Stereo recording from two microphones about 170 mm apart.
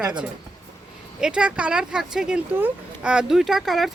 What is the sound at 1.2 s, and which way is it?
A woman's voice, 5° right (ahead or behind).